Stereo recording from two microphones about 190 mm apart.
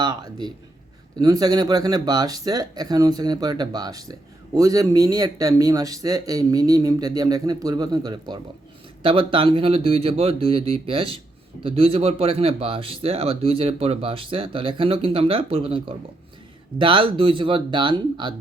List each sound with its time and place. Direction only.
0.0 s a man's voice: 20° right (ahead or behind)